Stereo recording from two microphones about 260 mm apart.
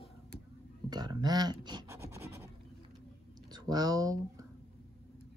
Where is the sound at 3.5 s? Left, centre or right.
Centre.